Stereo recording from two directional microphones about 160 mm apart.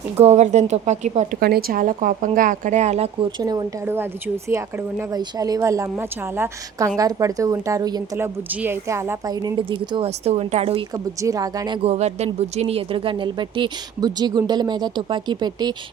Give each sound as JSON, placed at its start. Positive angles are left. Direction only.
{"t": 0.2, "sound": "a woman's voice", "side_deg": -45}
{"t": 1.4, "sound": "speech", "side_deg": -75}
{"t": 3.4, "sound": "a woman's voice", "side_deg": -25}
{"t": 3.8, "sound": "a woman's voice", "side_deg": -15}
{"t": 10.9, "sound": "a woman's voice", "side_deg": -20}
{"t": 11.8, "sound": "a woman's voice", "side_deg": -40}